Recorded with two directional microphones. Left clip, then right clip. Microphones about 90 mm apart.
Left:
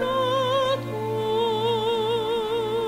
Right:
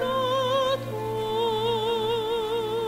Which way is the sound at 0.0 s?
30° left (ahead or behind).